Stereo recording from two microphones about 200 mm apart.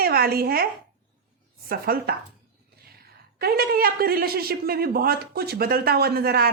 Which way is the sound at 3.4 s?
50° right (ahead or behind).